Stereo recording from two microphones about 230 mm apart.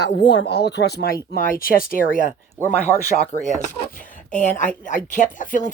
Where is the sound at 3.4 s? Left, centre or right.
Left.